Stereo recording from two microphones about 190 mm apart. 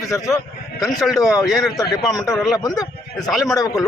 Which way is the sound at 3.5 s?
20° left (ahead or behind).